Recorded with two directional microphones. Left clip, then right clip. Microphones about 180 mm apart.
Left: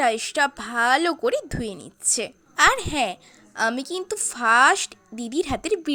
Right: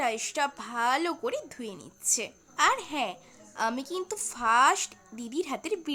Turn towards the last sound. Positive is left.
turn(degrees=25)  # may be behind; listen again after turning